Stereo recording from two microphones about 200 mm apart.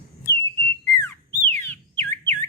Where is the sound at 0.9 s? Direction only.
10° left (ahead or behind).